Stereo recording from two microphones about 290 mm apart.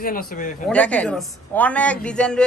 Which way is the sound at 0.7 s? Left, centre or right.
Centre.